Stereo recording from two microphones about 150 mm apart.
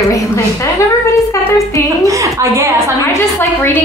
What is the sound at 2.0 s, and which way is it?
Speech, 20° right (ahead or behind).